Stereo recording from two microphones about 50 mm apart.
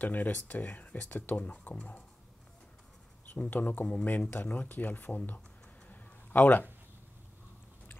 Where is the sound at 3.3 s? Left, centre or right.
Left.